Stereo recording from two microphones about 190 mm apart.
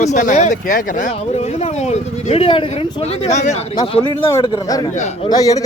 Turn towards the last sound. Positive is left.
turn(degrees=20)  # may be behind; listen again after turning